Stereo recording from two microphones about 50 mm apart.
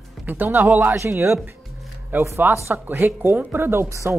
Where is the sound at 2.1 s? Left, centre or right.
Right.